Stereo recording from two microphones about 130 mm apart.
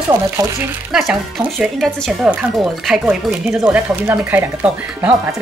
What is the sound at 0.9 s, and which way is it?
Speech, 5° right (ahead or behind).